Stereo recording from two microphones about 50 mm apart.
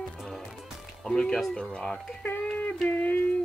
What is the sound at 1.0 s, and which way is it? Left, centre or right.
Speech, centre.